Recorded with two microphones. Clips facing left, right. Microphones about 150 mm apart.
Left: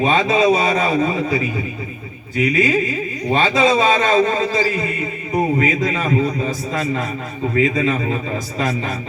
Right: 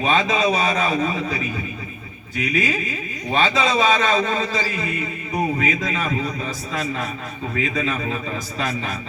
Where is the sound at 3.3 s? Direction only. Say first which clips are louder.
Left 4 dB; 30° left (ahead or behind).